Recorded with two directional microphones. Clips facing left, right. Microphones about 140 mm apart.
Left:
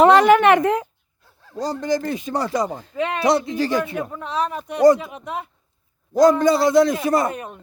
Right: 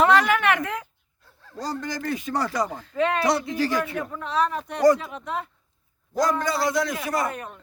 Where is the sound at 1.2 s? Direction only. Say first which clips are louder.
Left 6 dB; 10° left (ahead or behind).